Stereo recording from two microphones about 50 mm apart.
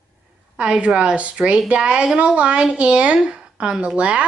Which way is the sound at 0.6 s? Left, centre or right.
Right.